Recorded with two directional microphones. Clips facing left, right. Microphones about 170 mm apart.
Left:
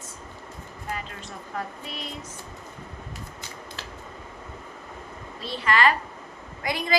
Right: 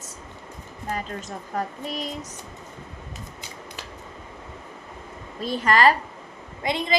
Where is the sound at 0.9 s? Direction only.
40° right (ahead or behind).